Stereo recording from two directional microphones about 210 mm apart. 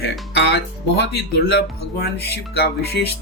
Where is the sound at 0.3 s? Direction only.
55° left (ahead or behind).